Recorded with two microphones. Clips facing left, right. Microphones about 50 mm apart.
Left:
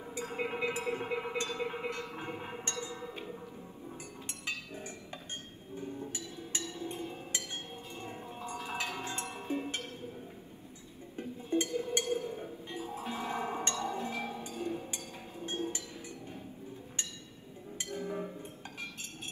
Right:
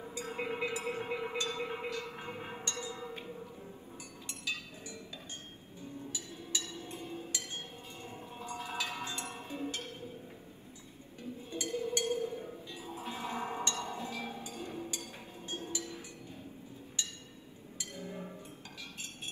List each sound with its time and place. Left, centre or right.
0.1 s a sound: left
1.6 s music: left
5.8 s a sound: left
6.7 s chink: left
8.0 s music: left
11.1 s music: left
17.7 s music: left